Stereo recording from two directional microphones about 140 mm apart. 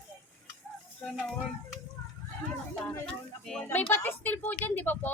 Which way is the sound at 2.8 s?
5° left (ahead or behind).